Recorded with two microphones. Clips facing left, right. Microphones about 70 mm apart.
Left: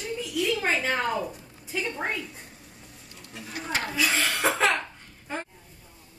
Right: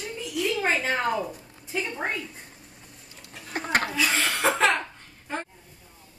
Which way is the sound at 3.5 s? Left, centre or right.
Right.